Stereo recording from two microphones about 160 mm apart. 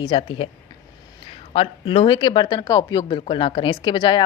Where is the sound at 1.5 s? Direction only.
35° left (ahead or behind).